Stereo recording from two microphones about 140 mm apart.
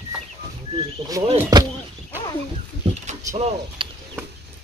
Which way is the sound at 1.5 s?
30° right (ahead or behind).